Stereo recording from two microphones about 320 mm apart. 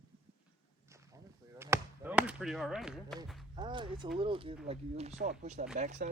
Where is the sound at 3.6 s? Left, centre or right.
Centre.